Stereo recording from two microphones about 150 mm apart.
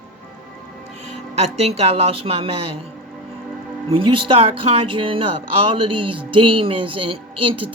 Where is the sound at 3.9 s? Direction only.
35° right (ahead or behind).